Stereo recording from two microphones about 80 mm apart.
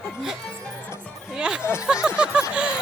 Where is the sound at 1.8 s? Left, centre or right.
Centre.